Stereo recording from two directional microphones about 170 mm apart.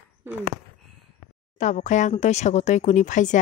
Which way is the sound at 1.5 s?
45° left (ahead or behind).